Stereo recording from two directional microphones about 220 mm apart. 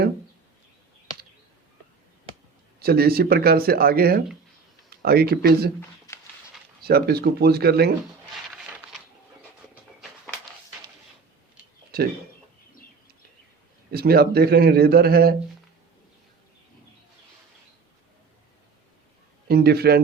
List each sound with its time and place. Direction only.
2.8 s a man's voice: 45° right (ahead or behind)
6.8 s a man's voice: 45° right (ahead or behind)
11.9 s speech: 45° right (ahead or behind)
13.9 s a man's voice: 45° right (ahead or behind)
19.5 s a man's voice: 45° right (ahead or behind)